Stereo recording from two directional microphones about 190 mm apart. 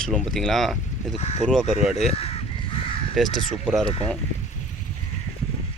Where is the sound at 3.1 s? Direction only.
Centre (ahead or behind).